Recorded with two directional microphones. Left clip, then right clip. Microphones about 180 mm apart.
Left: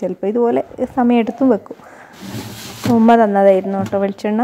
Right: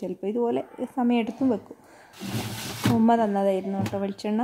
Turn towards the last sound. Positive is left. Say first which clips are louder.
# left 11 dB
turn(degrees=20)  # may be behind; listen again after turning